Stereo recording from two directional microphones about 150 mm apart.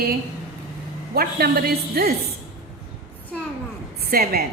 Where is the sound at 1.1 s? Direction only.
90° right.